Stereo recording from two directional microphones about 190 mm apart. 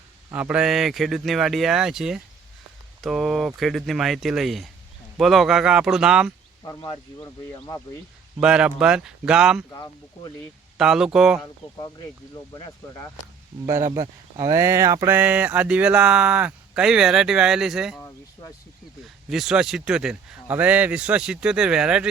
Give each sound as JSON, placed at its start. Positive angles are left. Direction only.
{"t": 0.3, "sound": "speech", "side_deg": -5}
{"t": 6.7, "sound": "speech", "side_deg": 20}
{"t": 8.4, "sound": "speech", "side_deg": -5}
{"t": 9.6, "sound": "speech", "side_deg": 20}
{"t": 10.8, "sound": "speech", "side_deg": 0}
{"t": 12.3, "sound": "speech", "side_deg": 20}
{"t": 13.7, "sound": "speech", "side_deg": -15}
{"t": 19.0, "sound": "speech", "side_deg": 0}